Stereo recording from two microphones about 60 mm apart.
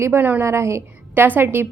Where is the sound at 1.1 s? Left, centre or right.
Right.